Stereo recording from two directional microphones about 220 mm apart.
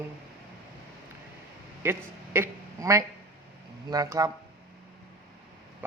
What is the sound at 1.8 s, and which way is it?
A man's voice, 10° right (ahead or behind).